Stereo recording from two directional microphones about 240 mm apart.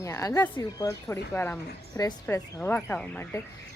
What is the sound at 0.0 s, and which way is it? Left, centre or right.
Speech, centre.